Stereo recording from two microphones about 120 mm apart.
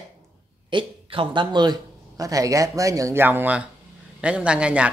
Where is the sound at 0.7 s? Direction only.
45° right (ahead or behind).